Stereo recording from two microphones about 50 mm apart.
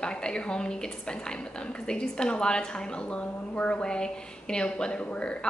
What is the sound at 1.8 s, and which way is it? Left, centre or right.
A woman's voice, centre.